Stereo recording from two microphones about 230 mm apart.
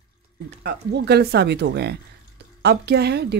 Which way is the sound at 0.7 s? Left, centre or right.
Right.